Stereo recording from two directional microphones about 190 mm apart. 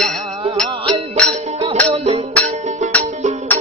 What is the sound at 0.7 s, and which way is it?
Music, 25° right (ahead or behind).